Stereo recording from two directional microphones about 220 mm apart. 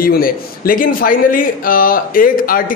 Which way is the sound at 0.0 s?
40° left (ahead or behind).